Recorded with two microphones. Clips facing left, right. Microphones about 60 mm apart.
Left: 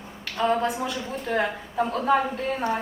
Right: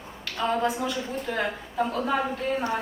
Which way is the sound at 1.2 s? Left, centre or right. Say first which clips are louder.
Left 7 dB; centre.